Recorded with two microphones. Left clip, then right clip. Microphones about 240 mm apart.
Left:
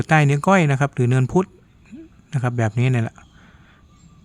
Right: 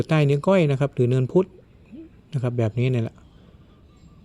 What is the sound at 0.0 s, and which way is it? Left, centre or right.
Speech, centre.